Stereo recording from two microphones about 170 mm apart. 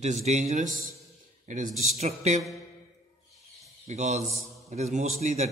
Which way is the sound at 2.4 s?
Centre (ahead or behind).